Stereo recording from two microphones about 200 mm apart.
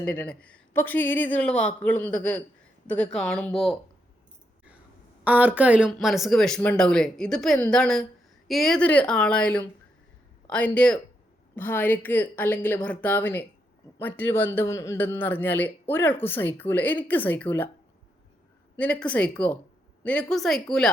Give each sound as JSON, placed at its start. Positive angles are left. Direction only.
{"t": 0.0, "sound": "a man's voice", "side_deg": 10}
{"t": 5.2, "sound": "a man's voice", "side_deg": -5}
{"t": 18.8, "sound": "a man's voice", "side_deg": 5}